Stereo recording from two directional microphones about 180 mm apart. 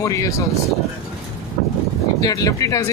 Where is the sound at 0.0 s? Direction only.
15° left (ahead or behind).